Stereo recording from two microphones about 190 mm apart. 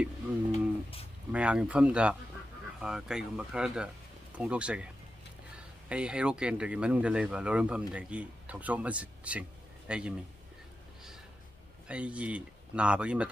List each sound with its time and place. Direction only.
0.5 s a sound: 30° left (ahead or behind)
1.3 s speech: 5° right (ahead or behind)
5.9 s a man's voice: 5° right (ahead or behind)
11.9 s speech: 5° right (ahead or behind)